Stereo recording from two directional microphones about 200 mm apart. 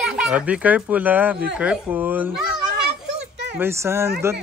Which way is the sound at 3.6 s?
10° right (ahead or behind).